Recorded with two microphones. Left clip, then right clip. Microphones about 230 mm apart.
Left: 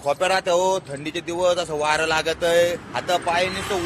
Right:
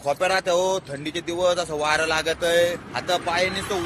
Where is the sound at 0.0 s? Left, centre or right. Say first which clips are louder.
Left 1 dB; centre.